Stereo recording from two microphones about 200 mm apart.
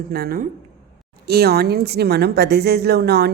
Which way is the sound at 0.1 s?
50° right (ahead or behind).